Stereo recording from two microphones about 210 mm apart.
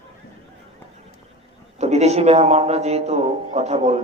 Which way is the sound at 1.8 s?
30° right (ahead or behind).